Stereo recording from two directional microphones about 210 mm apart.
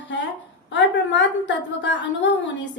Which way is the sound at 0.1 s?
55° left (ahead or behind).